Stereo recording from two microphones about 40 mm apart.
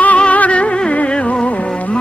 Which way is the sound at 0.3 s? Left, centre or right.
Left.